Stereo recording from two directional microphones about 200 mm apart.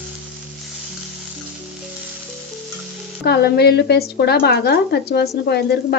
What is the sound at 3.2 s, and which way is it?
A woman's voice, 55° left (ahead or behind).